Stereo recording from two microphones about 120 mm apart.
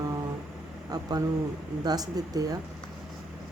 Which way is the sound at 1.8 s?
35° right (ahead or behind).